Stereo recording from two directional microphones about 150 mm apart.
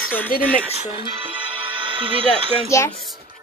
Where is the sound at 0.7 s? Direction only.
35° right (ahead or behind).